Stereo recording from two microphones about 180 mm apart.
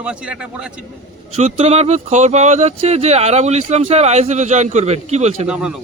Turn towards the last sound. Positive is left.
turn(degrees=-5)  # may be behind; listen again after turning